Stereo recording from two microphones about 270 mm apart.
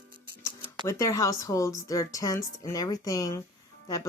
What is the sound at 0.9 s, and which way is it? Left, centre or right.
Speech, centre.